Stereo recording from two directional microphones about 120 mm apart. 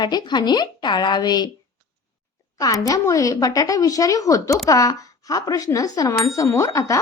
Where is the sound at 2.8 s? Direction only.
30° left (ahead or behind).